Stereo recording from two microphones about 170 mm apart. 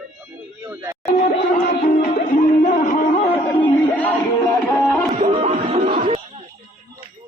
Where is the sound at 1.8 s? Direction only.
55° left (ahead or behind).